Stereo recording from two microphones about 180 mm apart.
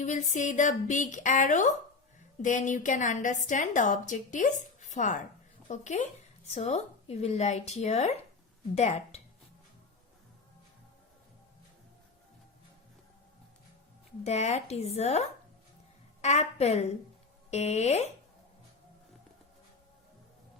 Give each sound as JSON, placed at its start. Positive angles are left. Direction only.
{"t": 0.0, "sound": "a woman's voice", "side_deg": 45}
{"t": 14.3, "sound": "speech", "side_deg": 35}